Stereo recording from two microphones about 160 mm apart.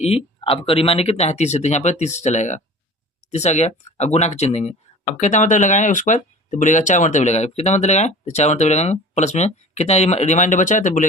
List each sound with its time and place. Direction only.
0.4 s speech: 35° left (ahead or behind); by 11.0 s 50° left (ahead or behind)